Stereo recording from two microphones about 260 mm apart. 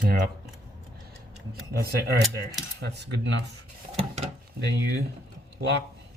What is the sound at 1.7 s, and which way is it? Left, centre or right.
Speech, right.